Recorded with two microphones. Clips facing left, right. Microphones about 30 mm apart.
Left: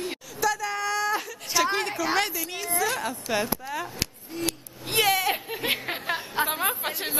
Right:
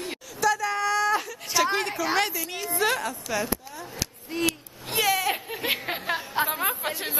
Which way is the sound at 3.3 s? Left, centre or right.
Left.